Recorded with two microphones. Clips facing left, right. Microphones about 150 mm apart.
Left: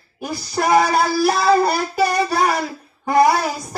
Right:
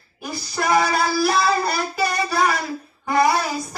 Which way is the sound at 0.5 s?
40° left (ahead or behind).